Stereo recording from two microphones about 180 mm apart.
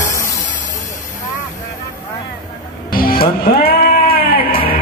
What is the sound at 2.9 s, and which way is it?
Music, 55° left (ahead or behind).